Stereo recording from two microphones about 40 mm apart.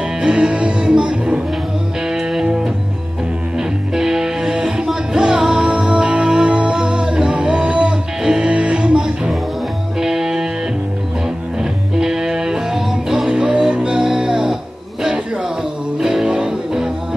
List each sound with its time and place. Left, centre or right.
0.2 s music: right
8.2 s music: centre
8.5 s music: right
9.9 s music: centre
11.6 s music: centre
13.4 s music: right
16.0 s music: centre